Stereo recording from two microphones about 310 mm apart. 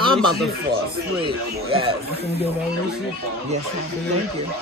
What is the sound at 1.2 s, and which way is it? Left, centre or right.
Speech, centre.